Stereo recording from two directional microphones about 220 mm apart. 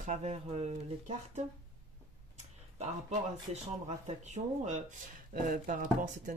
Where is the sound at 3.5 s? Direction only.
30° right (ahead or behind).